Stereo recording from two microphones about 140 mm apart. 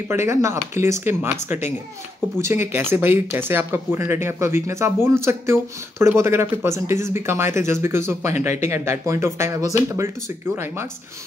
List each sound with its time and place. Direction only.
0.1 s speech: 20° right (ahead or behind)